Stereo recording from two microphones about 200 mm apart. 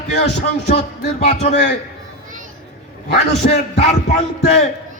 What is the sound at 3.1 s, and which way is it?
Speech, 55° left (ahead or behind).